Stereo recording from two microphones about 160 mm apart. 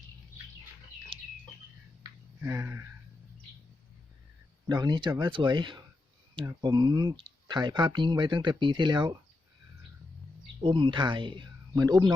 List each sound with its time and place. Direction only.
2.4 s a sound: 15° right (ahead or behind)
4.7 s speech: 25° right (ahead or behind)
10.6 s speech: 30° right (ahead or behind)